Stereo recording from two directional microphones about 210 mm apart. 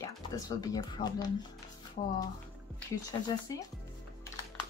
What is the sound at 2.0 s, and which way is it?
Speech, 35° left (ahead or behind).